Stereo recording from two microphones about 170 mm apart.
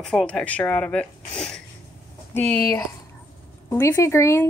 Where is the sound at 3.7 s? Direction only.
15° left (ahead or behind).